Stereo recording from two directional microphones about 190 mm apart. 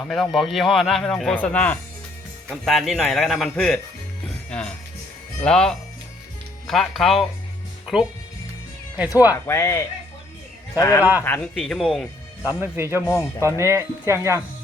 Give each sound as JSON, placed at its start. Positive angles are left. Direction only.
{"t": 0.0, "sound": "a man's voice", "side_deg": 0}
{"t": 4.4, "sound": "music", "side_deg": 5}
{"t": 5.4, "sound": "a man's voice", "side_deg": 5}
{"t": 9.3, "sound": "a man's voice", "side_deg": 15}
{"t": 12.5, "sound": "speech", "side_deg": -10}
{"t": 13.0, "sound": "speech", "side_deg": 10}
{"t": 13.6, "sound": "speech", "side_deg": -15}